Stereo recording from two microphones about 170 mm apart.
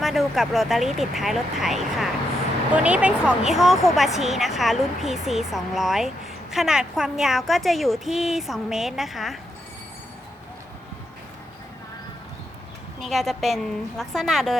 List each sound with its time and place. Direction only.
0.0 s speech: centre (ahead or behind)
13.0 s speech: centre (ahead or behind)